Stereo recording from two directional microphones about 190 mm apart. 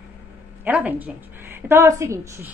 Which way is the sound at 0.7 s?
10° right (ahead or behind).